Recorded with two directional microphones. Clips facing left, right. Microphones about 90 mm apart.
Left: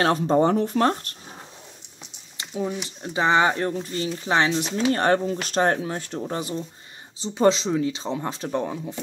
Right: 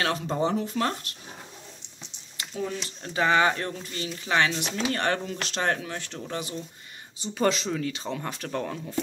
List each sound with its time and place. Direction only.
0.0 s speech: 40° left (ahead or behind)
2.5 s speech: 15° left (ahead or behind)